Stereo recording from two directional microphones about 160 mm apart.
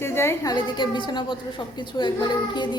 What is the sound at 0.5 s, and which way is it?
Child singing, 30° left (ahead or behind).